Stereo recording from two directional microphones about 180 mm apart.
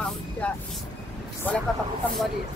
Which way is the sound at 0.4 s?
10° left (ahead or behind).